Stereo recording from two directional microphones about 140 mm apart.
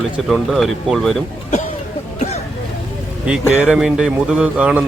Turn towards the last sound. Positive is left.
turn(degrees=-10)  # may be behind; listen again after turning